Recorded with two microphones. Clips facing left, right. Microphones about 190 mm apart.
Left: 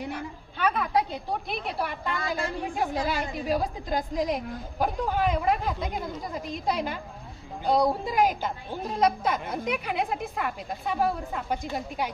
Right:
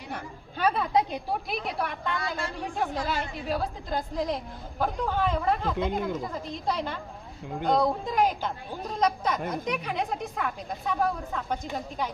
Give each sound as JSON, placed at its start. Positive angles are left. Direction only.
{"t": 0.6, "sound": "a woman's voice", "side_deg": -35}
{"t": 1.5, "sound": "a woman's voice", "side_deg": 0}